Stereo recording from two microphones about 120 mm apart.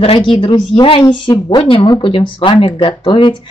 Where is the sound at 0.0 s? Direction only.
50° left (ahead or behind).